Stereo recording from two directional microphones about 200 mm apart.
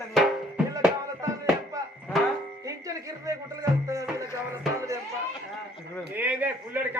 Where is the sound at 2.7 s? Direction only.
15° right (ahead or behind).